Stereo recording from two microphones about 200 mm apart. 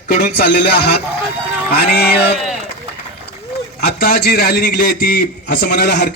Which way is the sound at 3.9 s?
50° left (ahead or behind).